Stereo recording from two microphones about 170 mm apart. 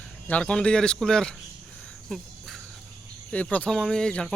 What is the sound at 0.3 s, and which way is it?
Speech, 5° left (ahead or behind).